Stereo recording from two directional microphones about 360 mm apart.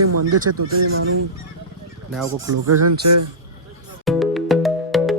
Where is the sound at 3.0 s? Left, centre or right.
Right.